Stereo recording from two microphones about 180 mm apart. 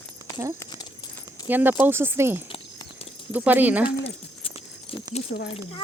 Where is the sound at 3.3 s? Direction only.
10° right (ahead or behind).